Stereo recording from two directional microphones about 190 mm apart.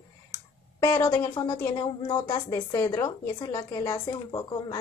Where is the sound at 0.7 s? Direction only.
20° left (ahead or behind).